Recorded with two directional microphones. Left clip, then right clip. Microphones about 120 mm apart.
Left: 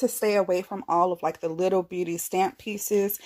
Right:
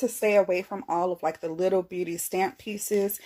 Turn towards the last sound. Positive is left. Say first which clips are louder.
# left 2 dB
turn(degrees=45)  # may be behind; listen again after turning